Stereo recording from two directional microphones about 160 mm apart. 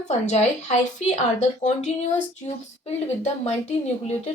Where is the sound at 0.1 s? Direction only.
45° left (ahead or behind).